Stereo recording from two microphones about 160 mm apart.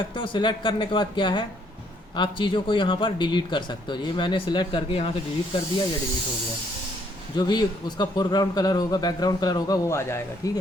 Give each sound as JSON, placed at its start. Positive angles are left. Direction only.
{"t": 0.1, "sound": "speech", "side_deg": 30}
{"t": 7.3, "sound": "a man's voice", "side_deg": 25}